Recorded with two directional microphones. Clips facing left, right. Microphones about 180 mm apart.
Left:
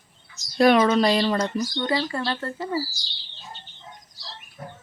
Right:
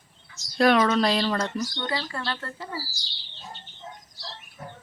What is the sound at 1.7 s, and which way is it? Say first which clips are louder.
Speech: left 6 dB; 20° left (ahead or behind).